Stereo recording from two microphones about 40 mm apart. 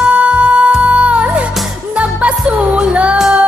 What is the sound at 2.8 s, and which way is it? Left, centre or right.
Music, right.